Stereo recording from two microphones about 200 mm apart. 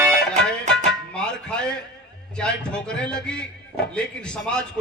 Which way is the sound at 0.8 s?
5° left (ahead or behind).